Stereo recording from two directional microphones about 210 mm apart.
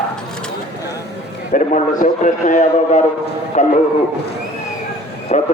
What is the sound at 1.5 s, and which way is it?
Speech, 35° left (ahead or behind).